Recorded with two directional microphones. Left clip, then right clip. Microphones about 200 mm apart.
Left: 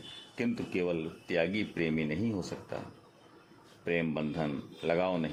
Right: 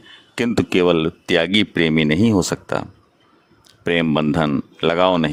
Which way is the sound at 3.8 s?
55° right (ahead or behind).